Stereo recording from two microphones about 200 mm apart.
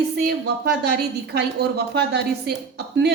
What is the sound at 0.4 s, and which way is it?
A woman's voice, 55° right (ahead or behind).